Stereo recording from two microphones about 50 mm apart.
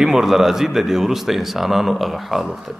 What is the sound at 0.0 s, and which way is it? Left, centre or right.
A man's voice, centre.